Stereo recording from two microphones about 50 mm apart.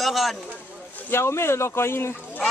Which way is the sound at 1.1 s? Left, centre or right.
Left.